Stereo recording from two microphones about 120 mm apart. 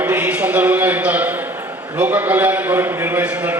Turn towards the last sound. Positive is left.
turn(degrees=-10)  # may be behind; listen again after turning